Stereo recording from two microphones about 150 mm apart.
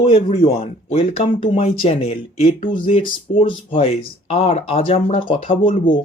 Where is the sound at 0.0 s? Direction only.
40° left (ahead or behind).